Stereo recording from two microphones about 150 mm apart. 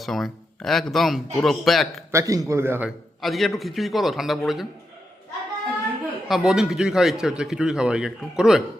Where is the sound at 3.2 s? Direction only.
Centre (ahead or behind).